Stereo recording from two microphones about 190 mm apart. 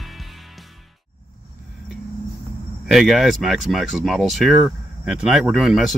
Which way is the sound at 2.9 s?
Centre (ahead or behind).